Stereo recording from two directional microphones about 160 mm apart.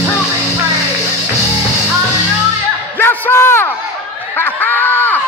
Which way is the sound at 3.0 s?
15° left (ahead or behind).